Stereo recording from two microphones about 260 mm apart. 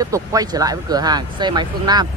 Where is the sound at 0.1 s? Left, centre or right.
Centre.